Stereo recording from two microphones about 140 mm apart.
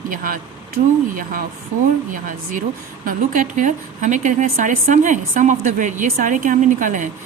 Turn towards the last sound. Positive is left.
turn(degrees=-65)  # may be behind; listen again after turning